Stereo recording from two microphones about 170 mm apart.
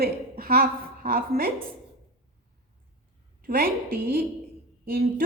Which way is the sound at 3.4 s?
60° right (ahead or behind).